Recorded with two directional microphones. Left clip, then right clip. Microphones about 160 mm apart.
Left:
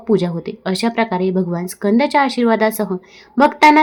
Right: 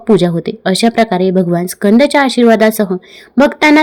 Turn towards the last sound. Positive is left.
turn(degrees=-30)  # may be behind; listen again after turning